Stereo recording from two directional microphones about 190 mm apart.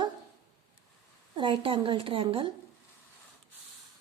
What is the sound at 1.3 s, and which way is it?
Speech, 25° right (ahead or behind).